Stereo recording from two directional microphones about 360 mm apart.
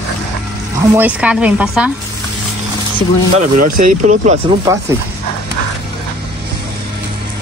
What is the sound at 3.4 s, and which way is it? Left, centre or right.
Speech, right.